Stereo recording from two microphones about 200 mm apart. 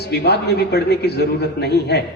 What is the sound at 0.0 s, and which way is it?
A man's voice, 55° left (ahead or behind).